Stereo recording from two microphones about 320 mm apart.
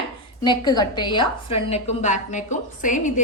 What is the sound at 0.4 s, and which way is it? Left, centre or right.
A woman's voice, centre.